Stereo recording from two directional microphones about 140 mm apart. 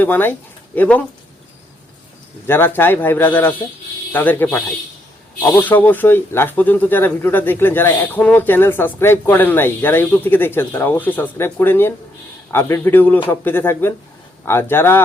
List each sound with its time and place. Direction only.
0.0 s speech: 15° left (ahead or behind)
2.5 s speech: 15° left (ahead or behind)